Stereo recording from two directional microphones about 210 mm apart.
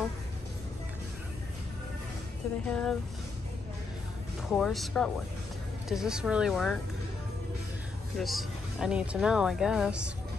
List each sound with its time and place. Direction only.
2.7 s speech: 5° left (ahead or behind)
4.5 s speech: centre (ahead or behind)
8.2 s speech: centre (ahead or behind)